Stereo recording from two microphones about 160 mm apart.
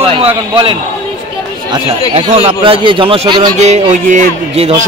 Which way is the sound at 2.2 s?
40° right (ahead or behind).